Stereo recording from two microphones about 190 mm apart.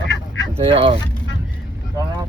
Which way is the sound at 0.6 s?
30° right (ahead or behind).